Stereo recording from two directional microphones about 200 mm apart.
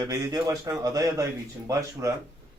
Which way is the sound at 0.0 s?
15° right (ahead or behind).